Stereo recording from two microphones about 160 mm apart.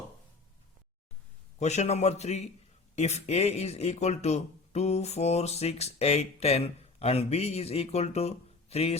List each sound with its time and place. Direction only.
1.5 s speech: 45° left (ahead or behind)